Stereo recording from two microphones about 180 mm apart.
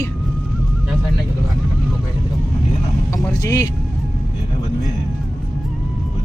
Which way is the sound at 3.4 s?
15° left (ahead or behind).